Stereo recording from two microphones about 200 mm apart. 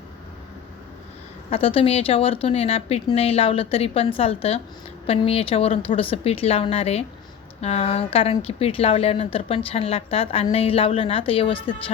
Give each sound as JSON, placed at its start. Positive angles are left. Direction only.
{"t": 1.5, "sound": "a woman's voice", "side_deg": 30}